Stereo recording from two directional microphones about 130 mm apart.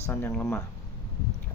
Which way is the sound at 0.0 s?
15° left (ahead or behind).